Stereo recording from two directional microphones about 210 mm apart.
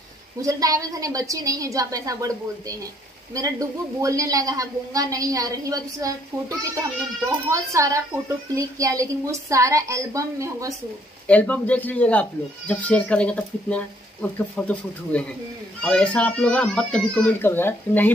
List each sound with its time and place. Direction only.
0.4 s a woman's voice: 15° right (ahead or behind)
3.3 s a woman's voice: 15° right (ahead or behind)
11.2 s a child's voice: 5° left (ahead or behind)